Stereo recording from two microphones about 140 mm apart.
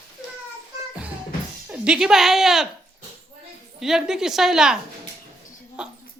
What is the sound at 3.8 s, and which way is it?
Speech, 5° right (ahead or behind).